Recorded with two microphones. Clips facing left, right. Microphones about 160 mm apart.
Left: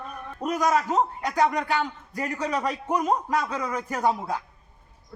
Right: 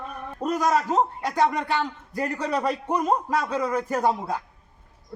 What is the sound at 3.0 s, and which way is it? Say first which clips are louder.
A man's voice: even; centre (ahead or behind).